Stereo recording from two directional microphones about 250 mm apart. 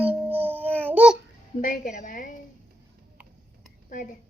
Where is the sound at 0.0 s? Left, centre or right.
Centre.